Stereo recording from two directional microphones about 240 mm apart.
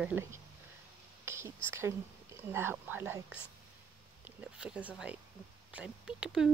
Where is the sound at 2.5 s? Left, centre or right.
Centre.